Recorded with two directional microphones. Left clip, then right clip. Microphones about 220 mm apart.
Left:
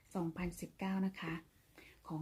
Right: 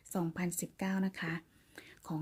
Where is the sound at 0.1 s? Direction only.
35° right (ahead or behind).